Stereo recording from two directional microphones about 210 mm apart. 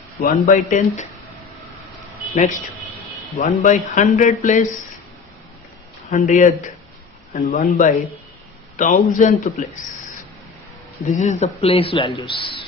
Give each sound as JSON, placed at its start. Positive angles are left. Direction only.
{"t": 0.2, "sound": "speech", "side_deg": 40}
{"t": 2.3, "sound": "speech", "side_deg": 35}
{"t": 6.1, "sound": "speech", "side_deg": 35}
{"t": 11.1, "sound": "speech", "side_deg": 35}